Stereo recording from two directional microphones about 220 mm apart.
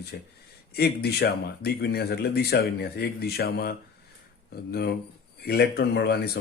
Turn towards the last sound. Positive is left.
turn(degrees=45)  # may be behind; listen again after turning